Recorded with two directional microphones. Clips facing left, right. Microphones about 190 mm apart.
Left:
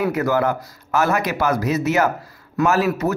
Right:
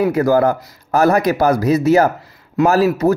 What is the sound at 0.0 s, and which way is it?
Speech, 35° right (ahead or behind).